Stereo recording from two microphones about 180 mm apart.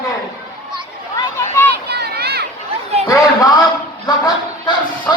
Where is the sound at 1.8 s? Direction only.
65° right (ahead or behind).